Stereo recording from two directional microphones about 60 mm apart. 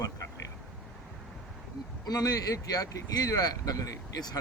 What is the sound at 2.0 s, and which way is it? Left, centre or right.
Speech, left.